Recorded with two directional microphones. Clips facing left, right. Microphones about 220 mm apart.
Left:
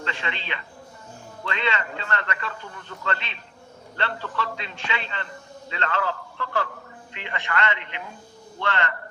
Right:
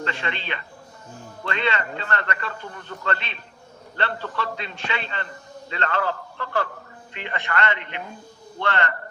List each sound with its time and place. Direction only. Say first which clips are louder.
0.0 s a man's voice: right 3 dB; 50° right (ahead or behind)